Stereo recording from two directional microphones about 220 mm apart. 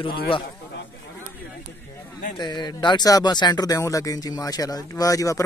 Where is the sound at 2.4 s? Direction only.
20° left (ahead or behind).